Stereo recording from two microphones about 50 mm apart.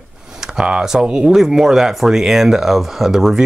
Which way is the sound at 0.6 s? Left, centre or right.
Centre.